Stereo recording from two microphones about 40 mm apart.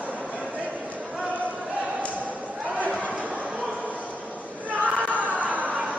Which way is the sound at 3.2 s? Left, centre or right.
Right.